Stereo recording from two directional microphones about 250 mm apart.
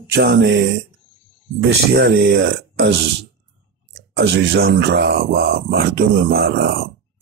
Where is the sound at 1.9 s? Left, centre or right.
Right.